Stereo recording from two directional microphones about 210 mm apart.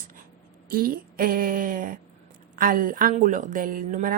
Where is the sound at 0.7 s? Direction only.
45° right (ahead or behind).